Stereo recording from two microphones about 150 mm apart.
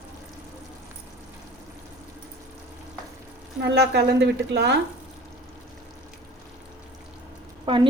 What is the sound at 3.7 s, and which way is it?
Speech, 90° right.